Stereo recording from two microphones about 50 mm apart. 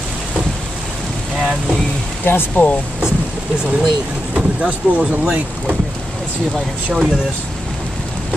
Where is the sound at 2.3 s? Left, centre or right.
Left.